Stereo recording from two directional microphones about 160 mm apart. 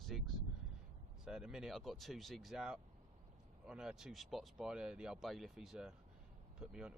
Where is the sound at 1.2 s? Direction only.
5° right (ahead or behind).